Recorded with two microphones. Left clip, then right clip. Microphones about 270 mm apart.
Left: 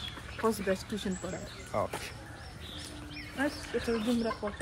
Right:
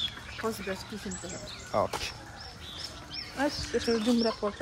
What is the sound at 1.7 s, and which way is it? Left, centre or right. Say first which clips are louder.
Speech: right 4 dB; right.